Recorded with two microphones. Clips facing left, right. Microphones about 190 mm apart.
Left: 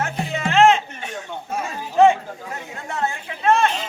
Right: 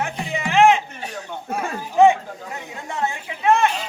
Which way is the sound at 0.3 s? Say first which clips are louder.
Even; 15° right (ahead or behind).